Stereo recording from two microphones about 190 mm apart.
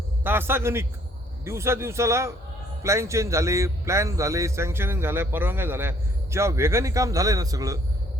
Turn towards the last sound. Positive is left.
turn(degrees=-20)  # may be behind; listen again after turning